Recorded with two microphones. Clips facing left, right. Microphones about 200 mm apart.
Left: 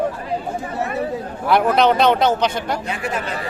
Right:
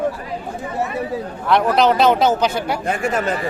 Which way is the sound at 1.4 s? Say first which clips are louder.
Even; centre (ahead or behind).